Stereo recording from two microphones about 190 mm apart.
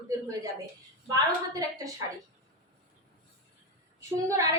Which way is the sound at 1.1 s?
20° right (ahead or behind).